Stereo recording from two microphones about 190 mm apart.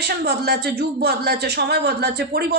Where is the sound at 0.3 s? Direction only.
60° right (ahead or behind).